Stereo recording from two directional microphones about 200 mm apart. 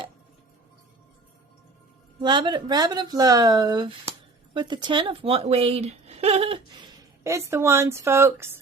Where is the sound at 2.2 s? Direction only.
20° right (ahead or behind).